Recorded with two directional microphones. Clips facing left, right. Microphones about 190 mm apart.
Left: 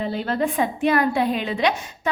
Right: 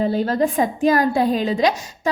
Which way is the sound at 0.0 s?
40° right (ahead or behind).